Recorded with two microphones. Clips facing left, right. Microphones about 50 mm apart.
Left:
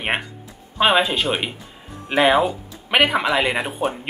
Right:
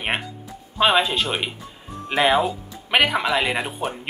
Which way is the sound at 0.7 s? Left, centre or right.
Centre.